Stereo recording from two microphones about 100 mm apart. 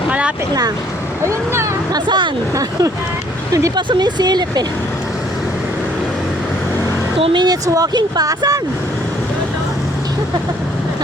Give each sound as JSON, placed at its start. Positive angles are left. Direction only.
{"t": 0.1, "sound": "boat", "side_deg": -10}
{"t": 1.2, "sound": "speech", "side_deg": -30}
{"t": 1.9, "sound": "speech", "side_deg": -50}
{"t": 3.8, "sound": "speech", "side_deg": -50}
{"t": 7.3, "sound": "speech", "side_deg": -40}